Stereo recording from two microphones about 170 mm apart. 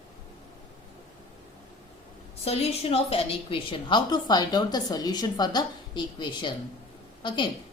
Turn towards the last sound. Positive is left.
turn(degrees=25)  # may be behind; listen again after turning